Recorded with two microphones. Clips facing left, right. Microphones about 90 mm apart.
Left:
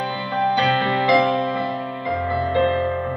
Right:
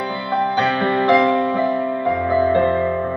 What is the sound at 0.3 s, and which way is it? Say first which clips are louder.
Music: right 1 dB; 25° right (ahead or behind).